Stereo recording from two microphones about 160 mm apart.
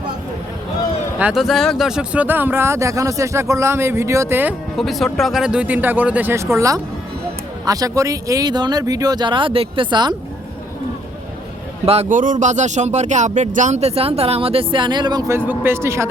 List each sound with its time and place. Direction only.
1.2 s speech: centre (ahead or behind)
4.8 s speech: centre (ahead or behind); by 10.2 s 30° right (ahead or behind)
11.9 s speech: 45° right (ahead or behind); by 15.4 s 25° right (ahead or behind)
15.4 s speech: 15° right (ahead or behind)